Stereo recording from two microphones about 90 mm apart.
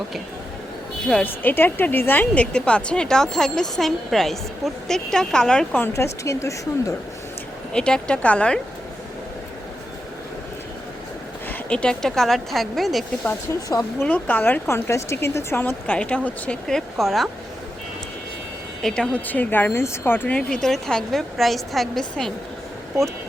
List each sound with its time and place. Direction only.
1.0 s a woman's voice: 15° left (ahead or behind)
5.9 s speech: 35° left (ahead or behind)
7.7 s a woman's voice: 10° left (ahead or behind)
11.7 s speech: 10° left (ahead or behind)
13.5 s speech: 40° left (ahead or behind)
14.0 s speech: 20° left (ahead or behind)
14.7 s a woman's voice: 30° left (ahead or behind); by 17.2 s centre (ahead or behind)
18.8 s a woman's voice: 5° left (ahead or behind)